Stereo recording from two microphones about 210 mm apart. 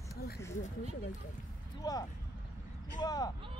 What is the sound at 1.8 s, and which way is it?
Speech, 20° left (ahead or behind).